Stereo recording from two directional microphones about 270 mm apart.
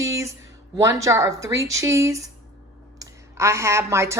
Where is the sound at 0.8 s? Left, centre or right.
Centre.